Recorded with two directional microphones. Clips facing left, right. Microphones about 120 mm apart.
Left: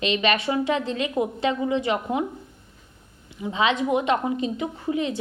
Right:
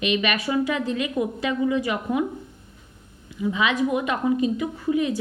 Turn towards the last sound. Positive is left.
turn(degrees=25)  # may be behind; listen again after turning